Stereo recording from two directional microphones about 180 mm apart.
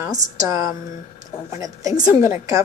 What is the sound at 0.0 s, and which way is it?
A woman's voice, 15° right (ahead or behind).